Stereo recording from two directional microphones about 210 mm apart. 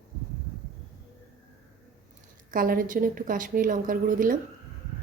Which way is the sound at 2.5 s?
40° right (ahead or behind).